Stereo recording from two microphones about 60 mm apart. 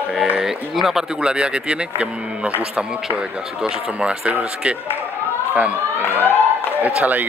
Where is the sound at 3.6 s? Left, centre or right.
Centre.